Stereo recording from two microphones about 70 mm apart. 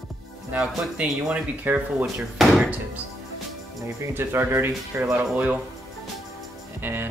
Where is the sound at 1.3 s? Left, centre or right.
Right.